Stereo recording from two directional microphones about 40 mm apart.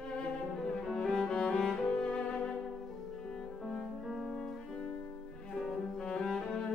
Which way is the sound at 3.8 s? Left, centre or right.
Centre.